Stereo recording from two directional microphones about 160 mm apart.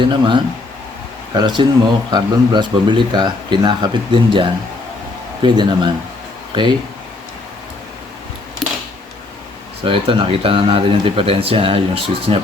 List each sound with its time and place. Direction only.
0.0 s a man's voice: 30° right (ahead or behind)
9.8 s speech: 35° right (ahead or behind)